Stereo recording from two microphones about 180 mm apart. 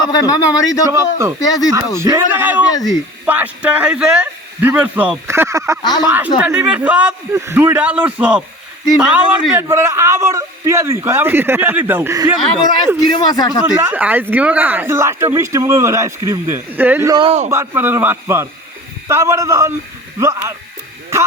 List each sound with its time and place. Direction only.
0.1 s speech: 20° left (ahead or behind)
0.9 s speech: 15° right (ahead or behind)
1.4 s speech: 20° left (ahead or behind)
2.0 s speech: 15° right (ahead or behind)
13.0 s speech: 25° left (ahead or behind)
13.7 s speech: 10° right (ahead or behind)
17.2 s a man's voice: 35° right (ahead or behind)
17.5 s speech: 15° right (ahead or behind)